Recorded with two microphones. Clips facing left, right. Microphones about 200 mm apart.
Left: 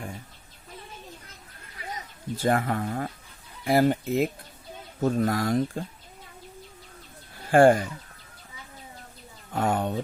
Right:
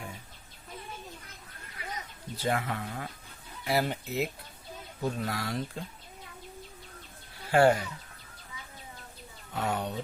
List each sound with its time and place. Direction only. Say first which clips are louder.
2.3 s speech: left 6 dB; 50° left (ahead or behind)
7.5 s speech: left 5 dB; 50° left (ahead or behind)
9.5 s speech: left 6 dB; 50° left (ahead or behind)